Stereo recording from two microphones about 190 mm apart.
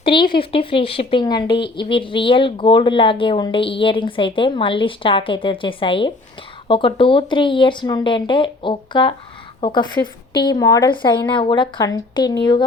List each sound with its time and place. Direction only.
0.0 s a woman's voice: 25° left (ahead or behind)